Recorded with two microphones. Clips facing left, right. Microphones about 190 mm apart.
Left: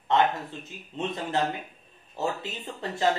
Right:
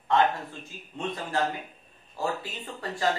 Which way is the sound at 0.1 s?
20° left (ahead or behind).